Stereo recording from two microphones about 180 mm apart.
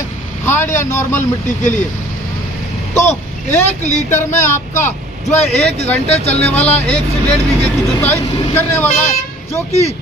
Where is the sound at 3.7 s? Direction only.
40° left (ahead or behind).